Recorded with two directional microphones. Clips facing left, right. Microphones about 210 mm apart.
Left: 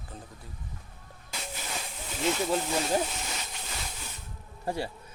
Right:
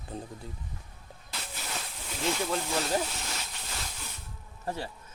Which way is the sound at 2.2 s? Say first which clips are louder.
Left 3 dB; 5° left (ahead or behind).